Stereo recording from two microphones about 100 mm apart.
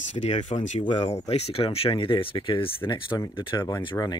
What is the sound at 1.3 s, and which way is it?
Speech, 80° left.